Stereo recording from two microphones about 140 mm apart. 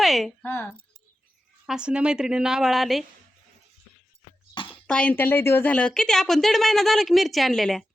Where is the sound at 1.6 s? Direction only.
5° right (ahead or behind).